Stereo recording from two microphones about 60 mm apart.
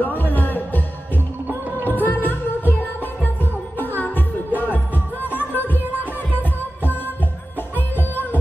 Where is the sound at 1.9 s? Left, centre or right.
Left.